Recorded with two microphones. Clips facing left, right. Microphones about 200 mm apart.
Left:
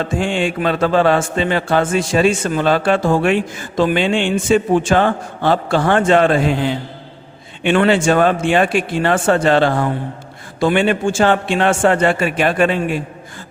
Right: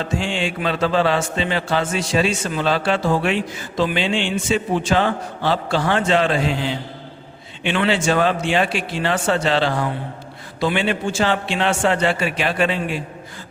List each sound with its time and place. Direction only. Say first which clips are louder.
0.0 s speech: left 5 dB; 50° left (ahead or behind)